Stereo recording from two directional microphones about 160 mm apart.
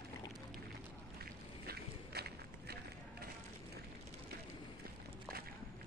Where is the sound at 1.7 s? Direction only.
75° right (ahead or behind).